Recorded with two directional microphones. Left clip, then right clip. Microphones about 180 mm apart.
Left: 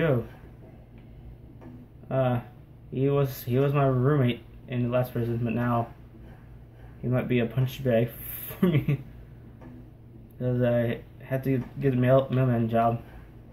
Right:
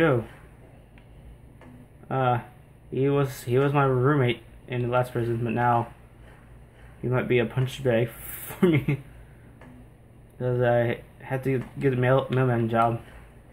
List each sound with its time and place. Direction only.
2.0 s speech: 50° right (ahead or behind)
7.1 s speech: 50° right (ahead or behind)
10.4 s speech: 50° right (ahead or behind)